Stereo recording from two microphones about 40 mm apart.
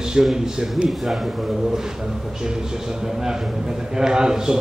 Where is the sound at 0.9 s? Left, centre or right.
Centre.